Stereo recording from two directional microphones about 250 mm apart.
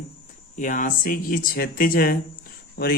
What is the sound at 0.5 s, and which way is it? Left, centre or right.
A man's voice, left.